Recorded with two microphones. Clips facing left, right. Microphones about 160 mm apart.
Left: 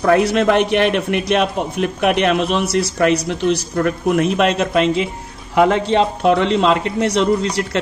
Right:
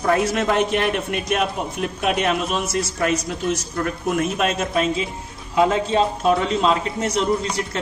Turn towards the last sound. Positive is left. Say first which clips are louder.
# left 4 dB
turn(degrees=70)  # may be behind; listen again after turning